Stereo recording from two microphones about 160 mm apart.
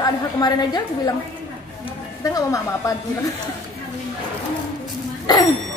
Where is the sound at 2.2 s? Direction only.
20° left (ahead or behind).